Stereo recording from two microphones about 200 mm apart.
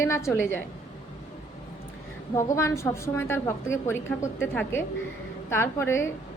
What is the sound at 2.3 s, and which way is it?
A woman's voice, 15° left (ahead or behind).